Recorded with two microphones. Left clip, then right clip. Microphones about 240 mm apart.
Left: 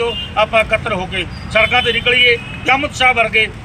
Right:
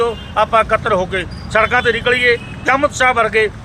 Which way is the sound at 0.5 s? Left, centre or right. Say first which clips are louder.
Right 2 dB; centre.